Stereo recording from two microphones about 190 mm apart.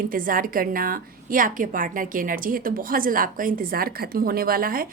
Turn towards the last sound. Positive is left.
turn(degrees=-50)  # may be behind; listen again after turning